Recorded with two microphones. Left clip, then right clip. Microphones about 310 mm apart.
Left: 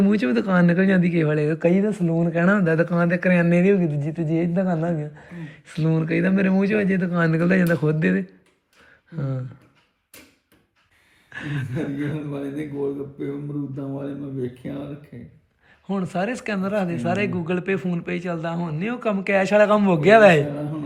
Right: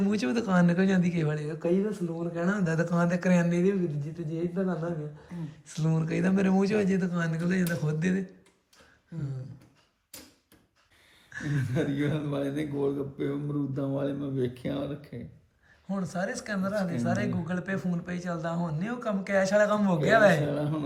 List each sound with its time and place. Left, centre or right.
0.0 s speech: centre
1.5 s a woman's voice: centre
2.6 s speech: centre
3.5 s a woman's voice: centre
5.6 s speech: centre
11.3 s speech: centre